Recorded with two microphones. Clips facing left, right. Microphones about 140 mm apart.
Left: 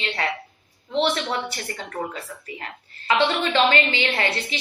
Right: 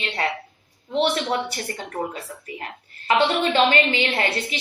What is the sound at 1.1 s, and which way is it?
A woman's voice, 25° right (ahead or behind).